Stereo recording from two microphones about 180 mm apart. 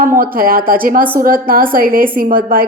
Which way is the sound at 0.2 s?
55° right (ahead or behind).